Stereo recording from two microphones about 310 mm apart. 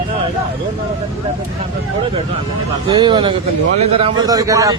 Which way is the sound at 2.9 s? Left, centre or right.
Centre.